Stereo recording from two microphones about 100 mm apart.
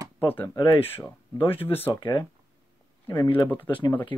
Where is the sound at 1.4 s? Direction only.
65° left (ahead or behind).